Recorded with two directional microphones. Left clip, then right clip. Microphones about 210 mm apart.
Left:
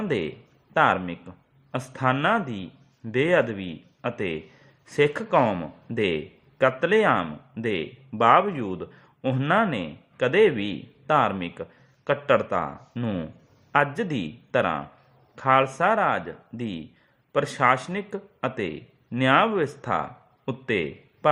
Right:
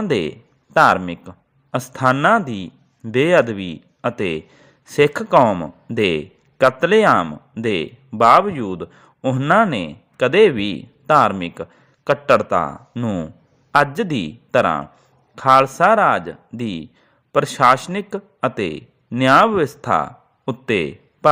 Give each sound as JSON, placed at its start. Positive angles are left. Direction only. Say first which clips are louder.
{"t": 0.0, "sound": "a man's voice", "louder": "right 7 dB", "side_deg": -30}